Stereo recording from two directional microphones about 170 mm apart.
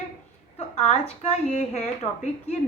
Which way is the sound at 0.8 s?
35° left (ahead or behind).